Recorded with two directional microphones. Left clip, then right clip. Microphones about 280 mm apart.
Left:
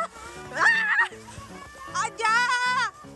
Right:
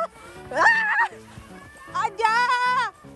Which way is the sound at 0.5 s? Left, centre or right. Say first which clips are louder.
Right 2 dB; centre.